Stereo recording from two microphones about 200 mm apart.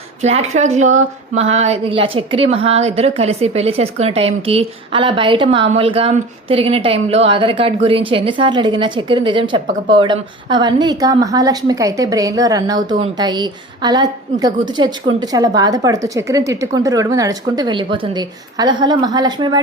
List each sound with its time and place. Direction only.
0.2 s a woman's voice: 35° right (ahead or behind)